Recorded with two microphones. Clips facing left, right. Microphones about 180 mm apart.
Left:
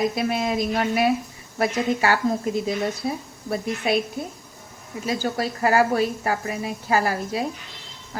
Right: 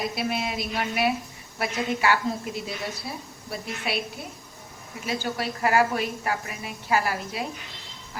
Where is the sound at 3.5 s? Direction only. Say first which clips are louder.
Left 8 dB; 50° left (ahead or behind).